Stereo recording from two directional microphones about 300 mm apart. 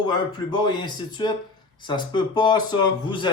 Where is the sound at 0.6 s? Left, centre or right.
Centre.